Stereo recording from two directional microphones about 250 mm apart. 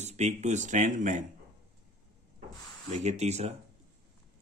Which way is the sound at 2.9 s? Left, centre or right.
Right.